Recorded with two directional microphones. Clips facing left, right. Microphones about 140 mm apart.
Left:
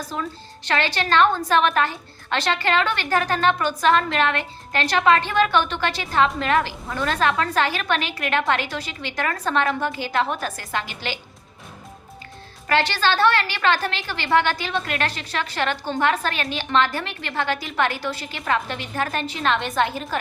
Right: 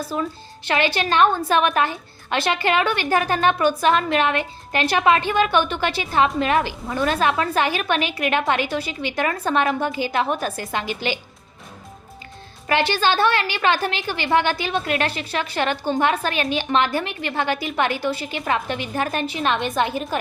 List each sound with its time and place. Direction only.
0.7 s a woman's voice: 15° right (ahead or behind)
12.6 s a woman's voice: 15° right (ahead or behind)